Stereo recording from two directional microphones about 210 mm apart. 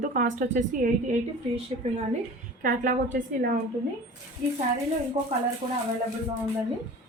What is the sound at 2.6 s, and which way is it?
Speech, 40° right (ahead or behind).